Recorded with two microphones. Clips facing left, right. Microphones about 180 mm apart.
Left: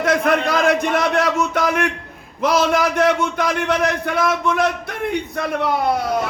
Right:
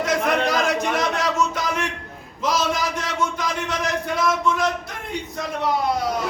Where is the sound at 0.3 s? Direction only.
60° left (ahead or behind).